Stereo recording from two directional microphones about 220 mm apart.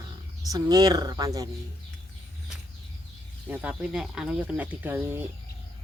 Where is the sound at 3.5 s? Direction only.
5° right (ahead or behind).